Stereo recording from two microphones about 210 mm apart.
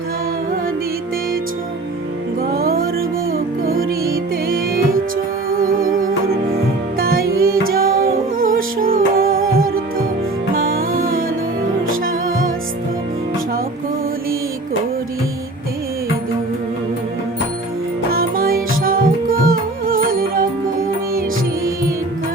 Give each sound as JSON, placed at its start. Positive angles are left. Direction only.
{"t": 2.6, "sound": "music", "side_deg": -45}
{"t": 18.1, "sound": "music", "side_deg": -45}